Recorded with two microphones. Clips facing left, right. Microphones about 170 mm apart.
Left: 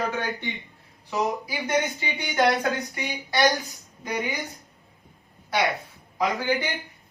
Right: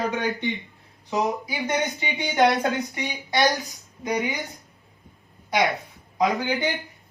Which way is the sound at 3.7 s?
20° right (ahead or behind).